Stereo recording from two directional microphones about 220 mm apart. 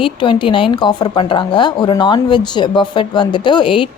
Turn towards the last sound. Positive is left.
turn(degrees=25)  # may be behind; listen again after turning